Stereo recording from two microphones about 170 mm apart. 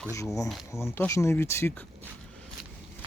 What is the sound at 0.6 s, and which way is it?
Speech, 15° left (ahead or behind).